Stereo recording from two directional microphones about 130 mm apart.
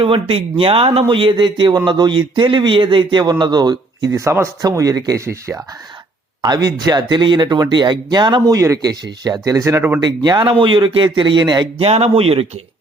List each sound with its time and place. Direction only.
0.0 s speech: 45° right (ahead or behind); by 10.0 s 20° right (ahead or behind)
10.0 s speech: 35° right (ahead or behind)
11.9 s speech: 55° right (ahead or behind)